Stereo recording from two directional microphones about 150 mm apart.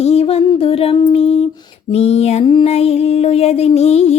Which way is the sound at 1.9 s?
45° left (ahead or behind).